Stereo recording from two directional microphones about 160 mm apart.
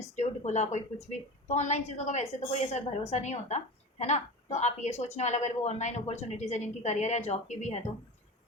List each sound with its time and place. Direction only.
0.2 s a woman's voice: 45° left (ahead or behind)